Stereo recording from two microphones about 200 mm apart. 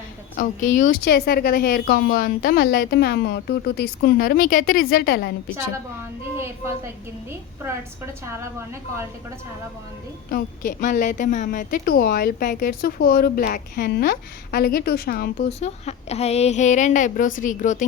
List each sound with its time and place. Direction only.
0.3 s a woman's voice: 40° left (ahead or behind)
1.0 s a woman's voice: 55° left (ahead or behind)
8.4 s a woman's voice: 15° right (ahead or behind)
10.3 s a woman's voice: 45° left (ahead or behind)
15.4 s a woman's voice: 35° left (ahead or behind)